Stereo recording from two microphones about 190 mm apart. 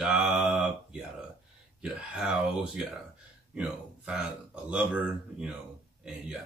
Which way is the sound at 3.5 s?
5° right (ahead or behind).